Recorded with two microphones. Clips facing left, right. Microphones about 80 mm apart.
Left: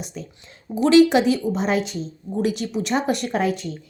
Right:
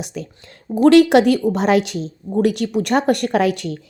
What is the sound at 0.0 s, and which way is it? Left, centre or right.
Speech, right.